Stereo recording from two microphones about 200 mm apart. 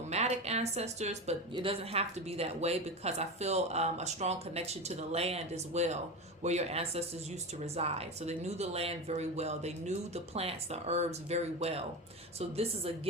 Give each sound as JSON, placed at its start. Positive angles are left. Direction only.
{"t": 0.1, "sound": "a woman's voice", "side_deg": -35}